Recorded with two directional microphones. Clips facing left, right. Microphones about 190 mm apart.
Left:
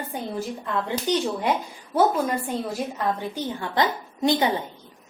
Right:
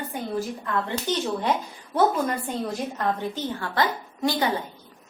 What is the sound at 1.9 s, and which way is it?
A woman's voice, 5° left (ahead or behind).